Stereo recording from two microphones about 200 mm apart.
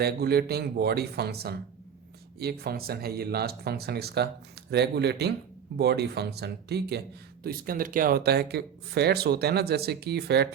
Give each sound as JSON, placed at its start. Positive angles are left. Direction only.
{"t": 0.0, "sound": "speech", "side_deg": -50}